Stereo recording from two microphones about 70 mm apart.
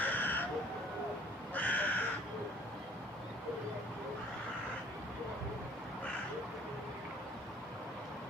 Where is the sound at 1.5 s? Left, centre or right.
Left.